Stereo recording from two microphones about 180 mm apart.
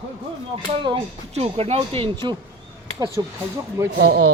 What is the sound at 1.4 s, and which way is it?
Speech, 35° right (ahead or behind).